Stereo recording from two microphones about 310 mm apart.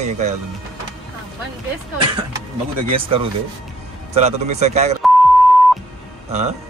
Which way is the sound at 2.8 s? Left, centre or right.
Centre.